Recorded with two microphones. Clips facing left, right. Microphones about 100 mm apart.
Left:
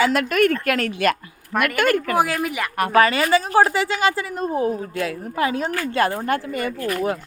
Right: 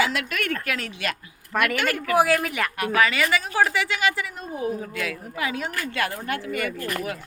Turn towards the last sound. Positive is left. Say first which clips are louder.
# left 6 dB
turn(degrees=30)  # may be behind; listen again after turning